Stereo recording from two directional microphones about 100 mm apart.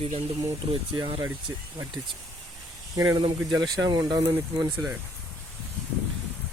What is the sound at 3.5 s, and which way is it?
Speech, 40° right (ahead or behind).